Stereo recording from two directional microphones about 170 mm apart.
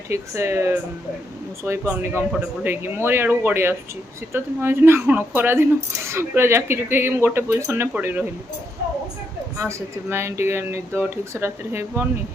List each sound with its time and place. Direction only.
0.1 s speech: 15° right (ahead or behind)
9.6 s speech: 15° right (ahead or behind)